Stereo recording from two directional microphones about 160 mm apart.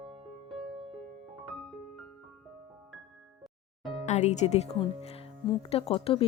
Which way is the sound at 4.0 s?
45° left (ahead or behind).